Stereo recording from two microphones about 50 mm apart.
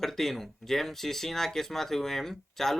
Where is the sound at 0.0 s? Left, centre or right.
Centre.